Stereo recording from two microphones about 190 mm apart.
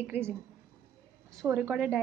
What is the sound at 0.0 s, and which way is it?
Speech, 10° right (ahead or behind).